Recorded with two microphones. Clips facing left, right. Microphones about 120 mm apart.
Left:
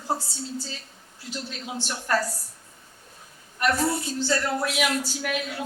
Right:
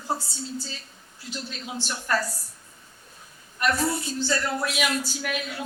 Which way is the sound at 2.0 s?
40° left (ahead or behind).